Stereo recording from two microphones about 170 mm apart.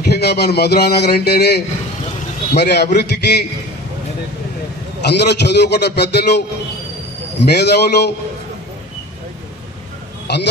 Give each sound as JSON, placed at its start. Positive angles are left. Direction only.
{"t": 0.0, "sound": "speech", "side_deg": 75}
{"t": 5.0, "sound": "speech", "side_deg": 80}
{"t": 10.2, "sound": "speech", "side_deg": 80}